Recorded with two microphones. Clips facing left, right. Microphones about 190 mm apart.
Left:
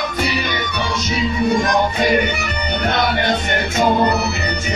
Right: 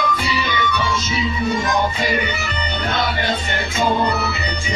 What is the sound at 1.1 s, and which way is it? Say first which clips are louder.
Music: left 6 dB; 45° left (ahead or behind).